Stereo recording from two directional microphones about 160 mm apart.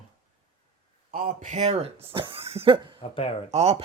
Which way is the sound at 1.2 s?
50° right (ahead or behind).